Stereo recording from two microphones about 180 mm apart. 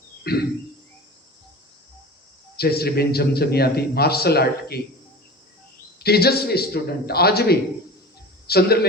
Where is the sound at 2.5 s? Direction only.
60° left (ahead or behind).